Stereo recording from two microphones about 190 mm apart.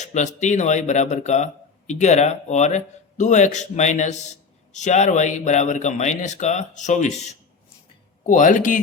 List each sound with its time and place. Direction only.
0.0 s a man's voice: 40° left (ahead or behind)